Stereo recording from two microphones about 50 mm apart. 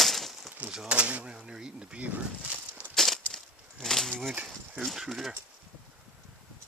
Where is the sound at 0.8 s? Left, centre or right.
Right.